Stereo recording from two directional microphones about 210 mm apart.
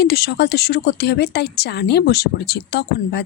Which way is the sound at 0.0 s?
50° left (ahead or behind).